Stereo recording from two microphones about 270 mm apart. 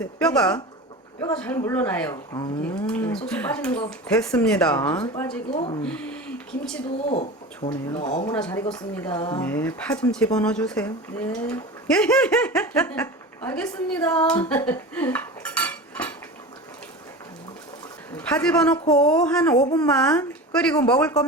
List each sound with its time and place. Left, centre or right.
0.0 s speech: centre
1.6 s speech: centre
5.5 s speech: left
7.1 s speech: left
14.7 s cutlery: centre
18.2 s speech: centre